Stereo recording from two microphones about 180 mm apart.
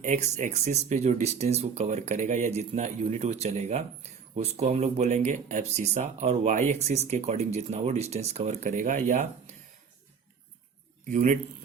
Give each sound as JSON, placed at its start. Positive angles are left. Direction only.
{"t": 0.0, "sound": "speech", "side_deg": -45}
{"t": 11.1, "sound": "a man's voice", "side_deg": -45}